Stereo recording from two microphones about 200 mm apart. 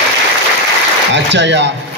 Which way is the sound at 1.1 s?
60° right (ahead or behind).